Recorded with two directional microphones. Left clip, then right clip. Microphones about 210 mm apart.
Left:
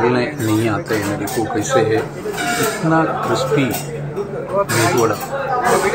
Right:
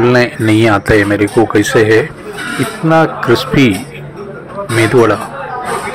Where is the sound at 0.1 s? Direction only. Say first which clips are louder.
Right 8 dB; 30° right (ahead or behind).